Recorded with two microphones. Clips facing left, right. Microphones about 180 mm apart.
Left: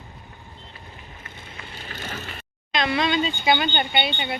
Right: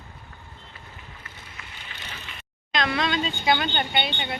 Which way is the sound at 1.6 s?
35° left (ahead or behind).